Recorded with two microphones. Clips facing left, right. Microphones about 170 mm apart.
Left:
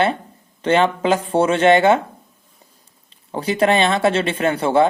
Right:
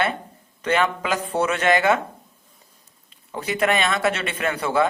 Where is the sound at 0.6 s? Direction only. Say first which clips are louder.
Left 6 dB; 30° left (ahead or behind).